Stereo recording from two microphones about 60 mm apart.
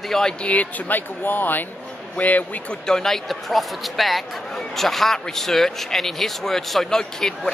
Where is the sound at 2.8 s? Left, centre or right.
Centre.